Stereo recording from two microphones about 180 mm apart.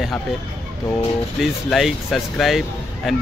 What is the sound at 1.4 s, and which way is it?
Speech, centre (ahead or behind).